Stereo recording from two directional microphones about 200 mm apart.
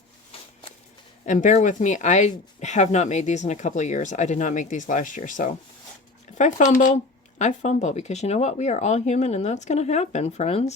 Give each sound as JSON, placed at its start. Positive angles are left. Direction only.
{"t": 1.2, "sound": "speech", "side_deg": 40}